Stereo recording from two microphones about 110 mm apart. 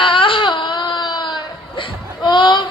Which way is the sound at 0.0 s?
50° left (ahead or behind).